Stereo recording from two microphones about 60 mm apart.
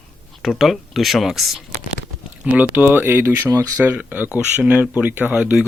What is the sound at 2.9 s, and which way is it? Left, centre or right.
Speech, right.